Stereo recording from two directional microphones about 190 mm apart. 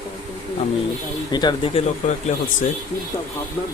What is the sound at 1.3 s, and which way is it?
Speech, 20° left (ahead or behind).